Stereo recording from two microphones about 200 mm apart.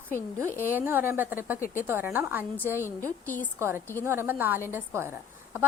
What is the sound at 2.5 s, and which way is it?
Speech, 10° left (ahead or behind).